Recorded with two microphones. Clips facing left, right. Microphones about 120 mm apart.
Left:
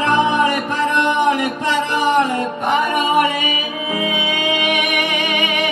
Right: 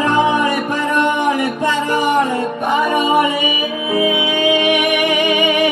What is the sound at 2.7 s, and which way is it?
Music, 15° right (ahead or behind).